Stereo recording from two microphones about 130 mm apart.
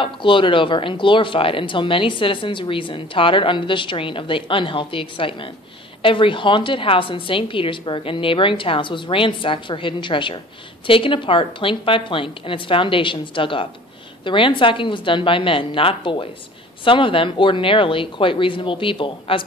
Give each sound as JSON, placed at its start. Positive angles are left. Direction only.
{"t": 0.0, "sound": "speech", "side_deg": 40}